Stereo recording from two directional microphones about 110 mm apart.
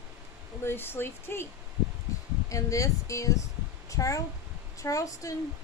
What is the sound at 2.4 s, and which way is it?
Speech, 30° left (ahead or behind).